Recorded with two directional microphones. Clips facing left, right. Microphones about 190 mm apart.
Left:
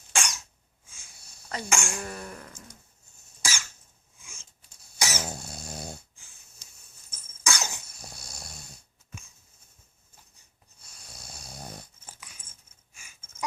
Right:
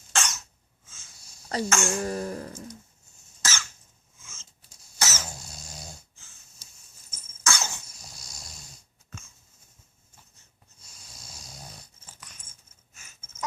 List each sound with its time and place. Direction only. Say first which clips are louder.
0.1 s cough: right 1 dB; 10° left (ahead or behind)
1.7 s speech: right 2 dB; 15° left (ahead or behind)
2.0 s cough: right 8 dB; 35° right (ahead or behind)
3.4 s cough: right 1 dB; 10° left (ahead or behind)
4.2 s filing: even; 15° left (ahead or behind)
4.9 s cough: left 1 dB; 15° left (ahead or behind)
5.3 s cough: left 6 dB; 60° left (ahead or behind)
7.4 s dog: right 1 dB; 15° left (ahead or behind)
7.9 s snoring: left 3 dB; 60° left (ahead or behind)
10.8 s snoring: left 2 dB; 60° left (ahead or behind)
12.2 s keys jangling: even; 10° left (ahead or behind)
12.9 s a sound: even; 10° left (ahead or behind)